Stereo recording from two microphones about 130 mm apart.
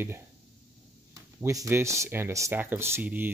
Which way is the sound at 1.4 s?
20° right (ahead or behind).